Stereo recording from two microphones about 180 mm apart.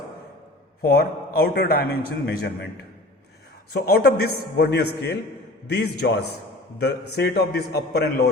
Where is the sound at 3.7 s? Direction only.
60° left (ahead or behind).